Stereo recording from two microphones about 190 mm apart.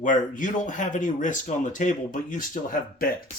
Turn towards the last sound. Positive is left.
turn(degrees=45)  # may be behind; listen again after turning